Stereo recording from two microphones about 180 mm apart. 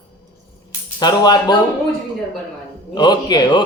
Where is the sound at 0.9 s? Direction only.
25° left (ahead or behind).